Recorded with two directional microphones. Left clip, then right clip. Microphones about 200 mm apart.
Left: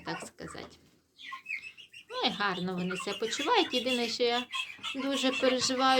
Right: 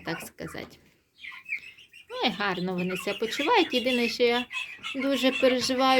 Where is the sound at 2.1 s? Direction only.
20° right (ahead or behind).